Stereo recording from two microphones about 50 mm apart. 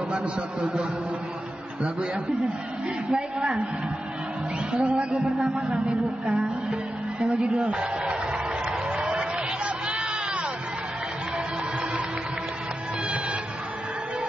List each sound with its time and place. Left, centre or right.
0.1 s a woman's voice: right
3.1 s a woman's voice: centre
4.7 s a woman's voice: right
8.9 s a sound: right